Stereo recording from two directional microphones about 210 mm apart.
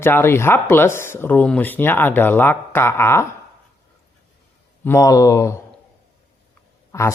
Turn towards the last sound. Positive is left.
turn(degrees=15)  # may be behind; listen again after turning